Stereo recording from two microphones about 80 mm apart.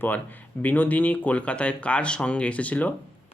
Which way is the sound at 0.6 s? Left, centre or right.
Left.